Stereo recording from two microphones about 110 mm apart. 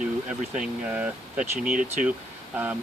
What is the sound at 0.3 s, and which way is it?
Speech, 10° right (ahead or behind).